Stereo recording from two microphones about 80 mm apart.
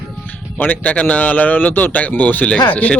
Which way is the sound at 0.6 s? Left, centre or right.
Left.